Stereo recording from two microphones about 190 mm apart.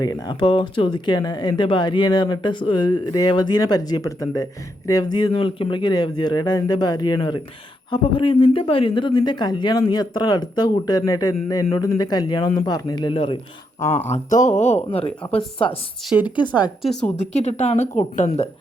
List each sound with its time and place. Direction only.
0.0 s speech: 20° left (ahead or behind)
14.1 s a woman's voice: 40° left (ahead or behind); by 16.5 s 25° left (ahead or behind)
16.8 s a woman's voice: centre (ahead or behind)
17.2 s a woman's voice: 35° left (ahead or behind)